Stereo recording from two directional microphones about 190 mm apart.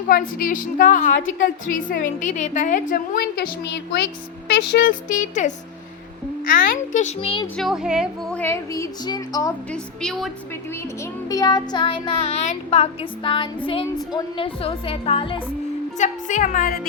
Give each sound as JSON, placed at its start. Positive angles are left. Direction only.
{"t": 0.1, "sound": "a woman's voice", "side_deg": 50}
{"t": 7.4, "sound": "a woman's voice", "side_deg": 5}
{"t": 9.7, "sound": "a woman's voice", "side_deg": 5}
{"t": 11.0, "sound": "child singing", "side_deg": 20}
{"t": 16.0, "sound": "a woman's voice", "side_deg": 40}